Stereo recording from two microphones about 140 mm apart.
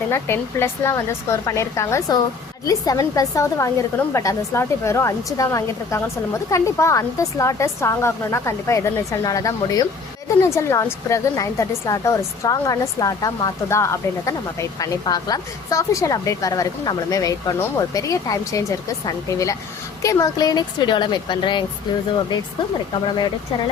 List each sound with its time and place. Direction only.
0.1 s a woman's voice: 20° left (ahead or behind); by 21.6 s 35° left (ahead or behind)